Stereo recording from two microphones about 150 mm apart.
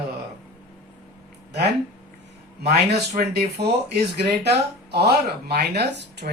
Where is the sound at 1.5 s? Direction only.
90° right.